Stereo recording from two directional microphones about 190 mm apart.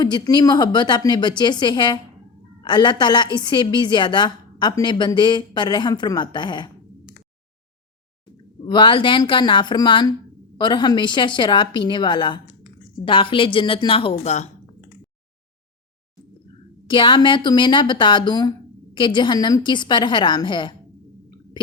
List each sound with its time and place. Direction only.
0.0 s a woman's voice: 20° left (ahead or behind)
8.6 s a woman's voice: 25° left (ahead or behind)
16.8 s a woman's voice: 25° left (ahead or behind)